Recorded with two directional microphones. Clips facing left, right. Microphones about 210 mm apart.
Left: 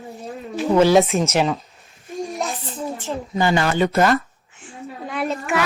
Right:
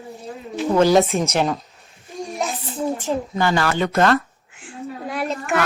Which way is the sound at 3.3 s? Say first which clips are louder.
Left 3 dB; 15° left (ahead or behind).